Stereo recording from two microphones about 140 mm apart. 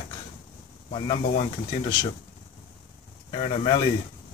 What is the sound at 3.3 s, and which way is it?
Speech, 40° left (ahead or behind).